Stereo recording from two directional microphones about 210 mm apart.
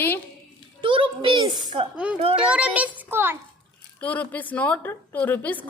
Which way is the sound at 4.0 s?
5° left (ahead or behind).